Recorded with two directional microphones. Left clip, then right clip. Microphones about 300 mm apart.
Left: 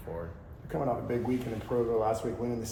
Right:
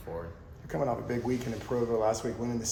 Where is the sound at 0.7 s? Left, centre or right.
Right.